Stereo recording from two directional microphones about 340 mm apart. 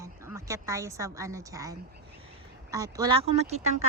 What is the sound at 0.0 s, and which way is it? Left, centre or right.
A woman's voice, centre.